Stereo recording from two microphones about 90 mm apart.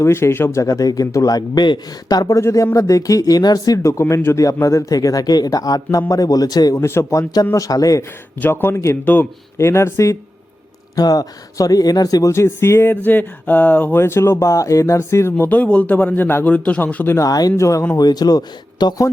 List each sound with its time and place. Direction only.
0.0 s a man's voice: 30° left (ahead or behind); by 6.7 s 45° left (ahead or behind)
6.7 s a man's voice: 30° left (ahead or behind)
8.4 s speech: 25° left (ahead or behind); by 12.3 s 45° left (ahead or behind)
12.3 s speech: 30° left (ahead or behind)
17.2 s a man's voice: 45° left (ahead or behind)
17.9 s speech: 45° left (ahead or behind)